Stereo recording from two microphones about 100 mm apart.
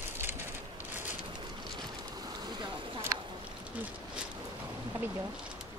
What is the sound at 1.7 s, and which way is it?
Boat, 45° right (ahead or behind).